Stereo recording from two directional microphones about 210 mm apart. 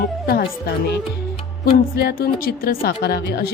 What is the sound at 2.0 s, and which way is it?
A woman's voice, 45° left (ahead or behind).